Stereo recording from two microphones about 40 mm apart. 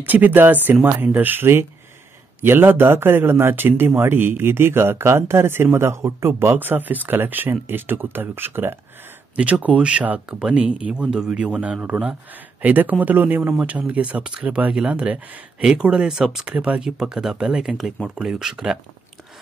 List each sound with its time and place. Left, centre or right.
0.0 s speech: right
1.4 s speech: right
2.4 s speech: right
6.4 s speech: right
9.3 s speech: right
10.9 s speech: centre
12.6 s speech: right
13.6 s speech: right
14.2 s speech: right
15.7 s speech: right
16.5 s speech: right
16.8 s speech: centre